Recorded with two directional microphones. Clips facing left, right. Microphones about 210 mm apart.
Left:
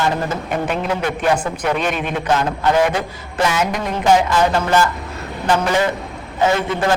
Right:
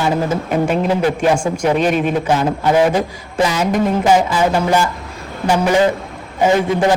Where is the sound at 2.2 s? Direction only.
10° right (ahead or behind).